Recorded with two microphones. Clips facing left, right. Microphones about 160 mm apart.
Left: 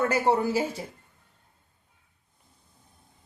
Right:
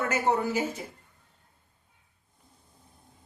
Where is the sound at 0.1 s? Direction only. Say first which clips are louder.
Left 3 dB; 35° left (ahead or behind).